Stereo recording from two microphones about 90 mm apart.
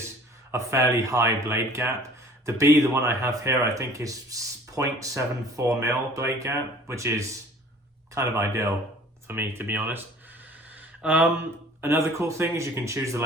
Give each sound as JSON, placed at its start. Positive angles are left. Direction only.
{"t": 0.5, "sound": "speech", "side_deg": -35}